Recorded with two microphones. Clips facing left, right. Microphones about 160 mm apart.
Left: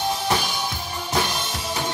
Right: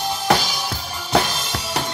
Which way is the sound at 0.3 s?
90° right.